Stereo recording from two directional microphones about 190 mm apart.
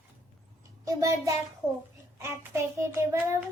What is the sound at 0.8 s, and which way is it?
Child singing, 15° right (ahead or behind).